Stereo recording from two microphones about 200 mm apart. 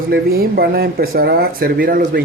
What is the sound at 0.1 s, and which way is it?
Speech, 50° right (ahead or behind).